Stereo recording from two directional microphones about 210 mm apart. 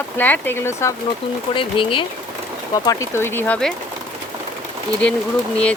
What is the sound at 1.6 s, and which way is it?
Speech, 25° left (ahead or behind).